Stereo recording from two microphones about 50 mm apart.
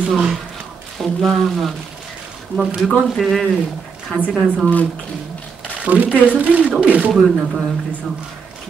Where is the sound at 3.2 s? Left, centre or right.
Centre.